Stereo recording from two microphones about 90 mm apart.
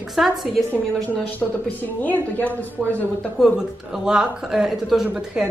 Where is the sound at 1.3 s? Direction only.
20° left (ahead or behind).